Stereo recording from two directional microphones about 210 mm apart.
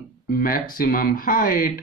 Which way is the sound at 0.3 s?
45° left (ahead or behind).